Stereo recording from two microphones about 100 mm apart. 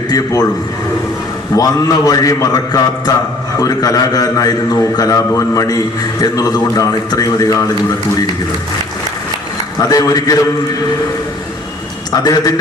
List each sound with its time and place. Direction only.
1.5 s a man's voice: 40° left (ahead or behind)
9.9 s a man's voice: 40° left (ahead or behind)
12.1 s a man's voice: 40° left (ahead or behind)